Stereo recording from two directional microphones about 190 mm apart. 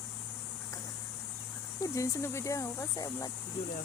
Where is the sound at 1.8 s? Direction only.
15° left (ahead or behind).